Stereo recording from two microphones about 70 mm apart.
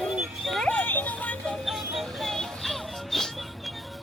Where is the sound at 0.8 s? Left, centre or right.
Left.